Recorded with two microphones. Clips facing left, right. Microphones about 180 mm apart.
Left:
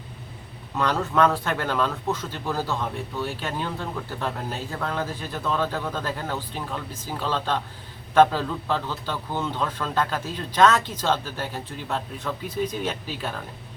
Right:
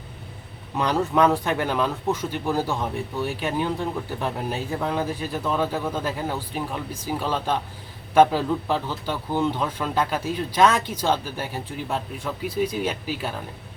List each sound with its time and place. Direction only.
0.8 s speech: 15° right (ahead or behind)